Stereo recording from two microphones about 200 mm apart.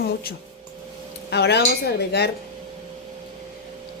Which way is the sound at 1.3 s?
55° left (ahead or behind).